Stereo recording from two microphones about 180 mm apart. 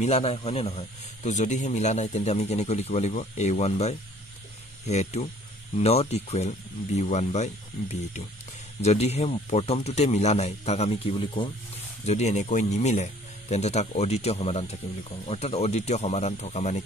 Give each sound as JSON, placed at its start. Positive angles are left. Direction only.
{"t": 0.0, "sound": "speech", "side_deg": 35}